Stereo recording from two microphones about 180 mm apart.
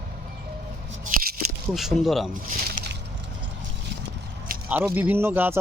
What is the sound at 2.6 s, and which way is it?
Boat, 55° right (ahead or behind).